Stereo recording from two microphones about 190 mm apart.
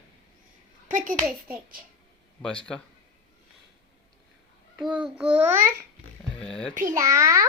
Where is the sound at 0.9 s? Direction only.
45° right (ahead or behind).